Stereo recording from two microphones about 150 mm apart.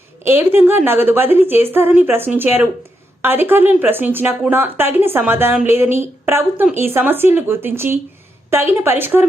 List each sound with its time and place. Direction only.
0.3 s speech: 15° right (ahead or behind)